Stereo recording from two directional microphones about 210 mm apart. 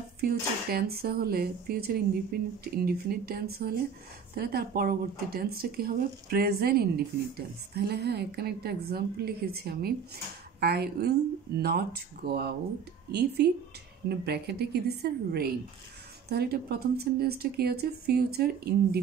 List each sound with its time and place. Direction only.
0.2 s speech: 45° right (ahead or behind)